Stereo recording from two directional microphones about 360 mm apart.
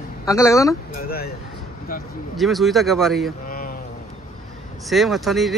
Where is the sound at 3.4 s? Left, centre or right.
Left.